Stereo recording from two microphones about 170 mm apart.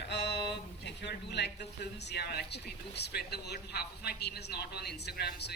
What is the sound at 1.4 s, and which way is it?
Speech, 90° left.